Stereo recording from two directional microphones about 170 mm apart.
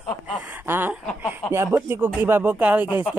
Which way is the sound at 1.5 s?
15° right (ahead or behind).